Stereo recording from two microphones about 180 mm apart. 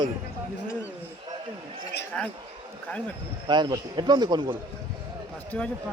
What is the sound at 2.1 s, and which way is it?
Speech, 5° left (ahead or behind).